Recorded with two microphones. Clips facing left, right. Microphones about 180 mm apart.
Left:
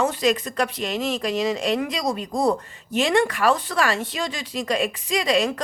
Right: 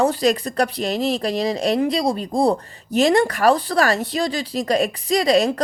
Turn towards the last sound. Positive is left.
turn(degrees=-35)  # may be behind; listen again after turning